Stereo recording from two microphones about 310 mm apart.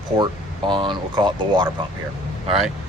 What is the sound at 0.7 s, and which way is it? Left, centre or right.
Speech, centre.